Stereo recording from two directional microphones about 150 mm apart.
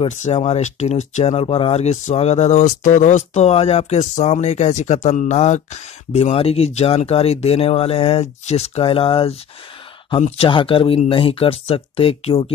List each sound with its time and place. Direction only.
0.2 s speech: 45° left (ahead or behind)